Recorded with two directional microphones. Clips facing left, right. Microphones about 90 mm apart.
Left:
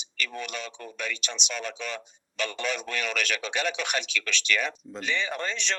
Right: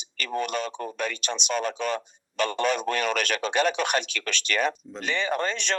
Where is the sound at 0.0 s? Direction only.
45° right (ahead or behind).